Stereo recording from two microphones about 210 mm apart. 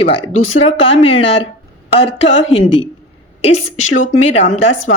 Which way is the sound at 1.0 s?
25° left (ahead or behind).